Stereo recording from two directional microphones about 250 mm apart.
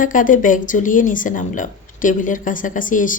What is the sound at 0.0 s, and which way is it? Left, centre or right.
Speech, left.